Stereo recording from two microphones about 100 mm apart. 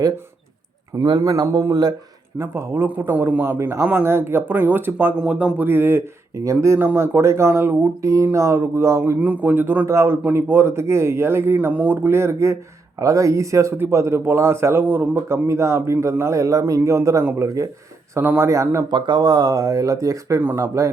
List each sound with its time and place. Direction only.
1.0 s speech: 45° right (ahead or behind)
2.4 s speech: 25° right (ahead or behind)
9.2 s a man's voice: 15° right (ahead or behind); by 18.9 s 30° right (ahead or behind)
18.9 s speech: 50° right (ahead or behind); by 20.9 s 30° right (ahead or behind)